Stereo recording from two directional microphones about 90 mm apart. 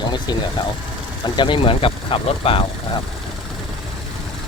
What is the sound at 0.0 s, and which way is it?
Speech, 55° left (ahead or behind).